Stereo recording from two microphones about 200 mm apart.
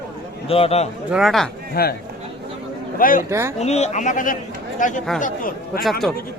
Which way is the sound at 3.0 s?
45° left (ahead or behind).